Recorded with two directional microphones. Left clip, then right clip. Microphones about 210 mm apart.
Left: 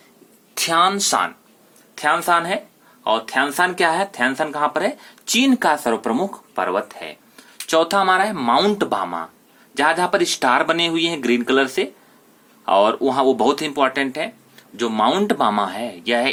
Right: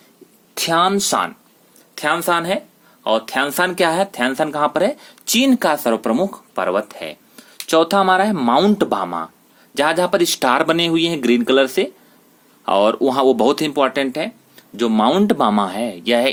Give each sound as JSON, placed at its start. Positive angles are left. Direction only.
{"t": 0.5, "sound": "speech", "side_deg": -45}